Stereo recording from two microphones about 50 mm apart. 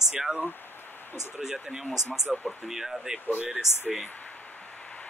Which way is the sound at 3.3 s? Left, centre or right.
Right.